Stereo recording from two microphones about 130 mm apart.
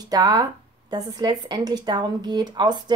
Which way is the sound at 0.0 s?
30° right (ahead or behind).